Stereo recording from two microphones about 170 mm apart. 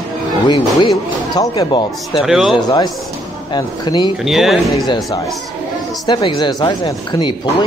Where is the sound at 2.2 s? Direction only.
5° right (ahead or behind).